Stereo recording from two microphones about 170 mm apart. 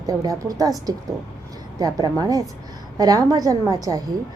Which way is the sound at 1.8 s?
20° right (ahead or behind).